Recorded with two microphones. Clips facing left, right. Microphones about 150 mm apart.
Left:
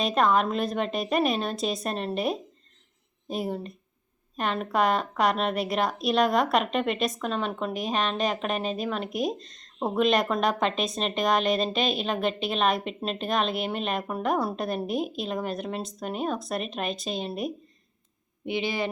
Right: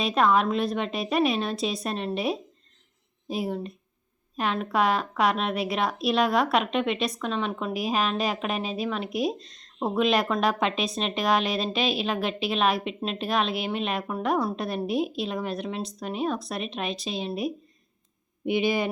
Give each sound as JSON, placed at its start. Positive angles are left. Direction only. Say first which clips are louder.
{"t": 0.0, "sound": "a woman's voice", "louder": "right 1 dB", "side_deg": 0}
{"t": 18.4, "sound": "speech", "louder": "right 4 dB", "side_deg": -15}